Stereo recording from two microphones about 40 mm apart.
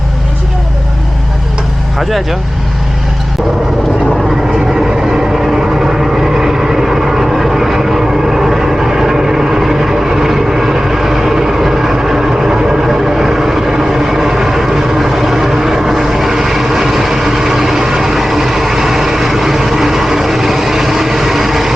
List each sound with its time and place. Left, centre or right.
2.0 s speech: centre
4.7 s vehicle: centre